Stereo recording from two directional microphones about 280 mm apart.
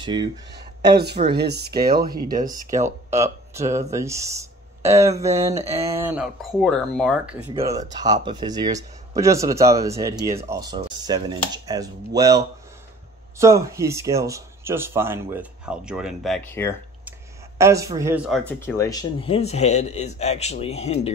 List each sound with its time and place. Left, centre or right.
0.0 s speech: centre
0.9 s speech: right
3.5 s speech: centre
7.5 s speech: centre
17.6 s speech: centre; by 21.1 s left